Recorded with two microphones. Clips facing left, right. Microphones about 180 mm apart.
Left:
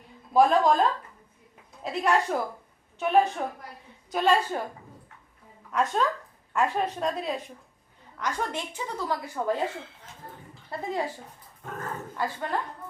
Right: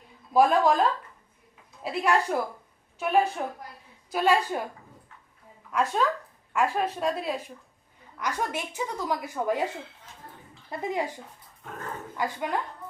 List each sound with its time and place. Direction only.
0.3 s a woman's voice: centre (ahead or behind)
5.7 s a woman's voice: centre (ahead or behind)
10.7 s a woman's voice: 15° right (ahead or behind)